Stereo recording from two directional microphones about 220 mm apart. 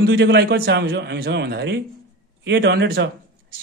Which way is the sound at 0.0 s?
50° right (ahead or behind).